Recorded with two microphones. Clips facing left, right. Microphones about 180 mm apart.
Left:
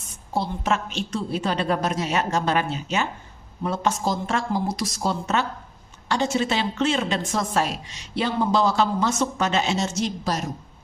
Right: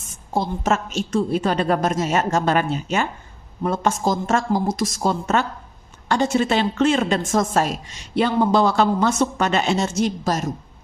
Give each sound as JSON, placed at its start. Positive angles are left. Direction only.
{"t": 0.3, "sound": "a woman's voice", "side_deg": -45}